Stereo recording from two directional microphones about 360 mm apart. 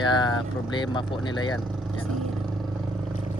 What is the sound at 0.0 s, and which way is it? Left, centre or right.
Speech, centre.